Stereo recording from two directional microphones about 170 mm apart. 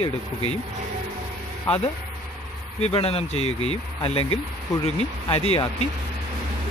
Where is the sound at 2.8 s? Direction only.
35° left (ahead or behind).